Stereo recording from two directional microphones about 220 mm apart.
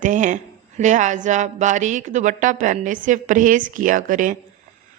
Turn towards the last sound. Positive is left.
turn(degrees=-35)  # may be behind; listen again after turning